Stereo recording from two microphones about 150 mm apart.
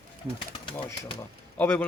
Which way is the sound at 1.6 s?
10° left (ahead or behind).